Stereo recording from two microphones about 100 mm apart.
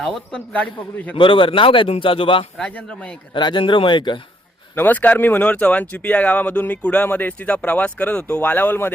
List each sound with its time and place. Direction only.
0.0 s speech: 10° left (ahead or behind)
1.1 s a man's voice: 55° left (ahead or behind)
2.6 s speech: 10° left (ahead or behind)
3.3 s speech: 50° left (ahead or behind)
4.7 s speech: 20° left (ahead or behind)